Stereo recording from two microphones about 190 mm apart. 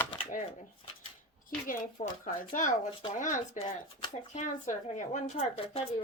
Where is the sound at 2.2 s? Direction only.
45° left (ahead or behind).